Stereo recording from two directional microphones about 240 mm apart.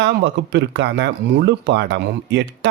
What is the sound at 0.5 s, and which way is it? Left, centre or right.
Speech, right.